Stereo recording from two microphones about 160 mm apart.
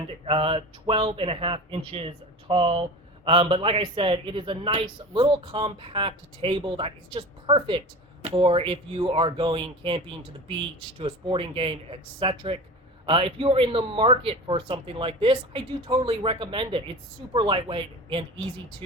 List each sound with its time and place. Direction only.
0.3 s speech: 40° right (ahead or behind)